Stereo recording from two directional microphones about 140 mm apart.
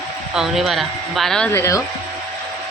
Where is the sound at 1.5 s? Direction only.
20° left (ahead or behind).